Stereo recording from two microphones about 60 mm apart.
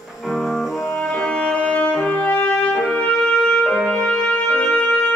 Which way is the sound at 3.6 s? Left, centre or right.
Centre.